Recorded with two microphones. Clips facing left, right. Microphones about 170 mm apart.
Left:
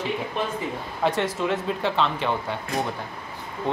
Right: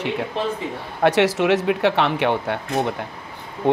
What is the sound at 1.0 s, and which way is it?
Speech, 80° right.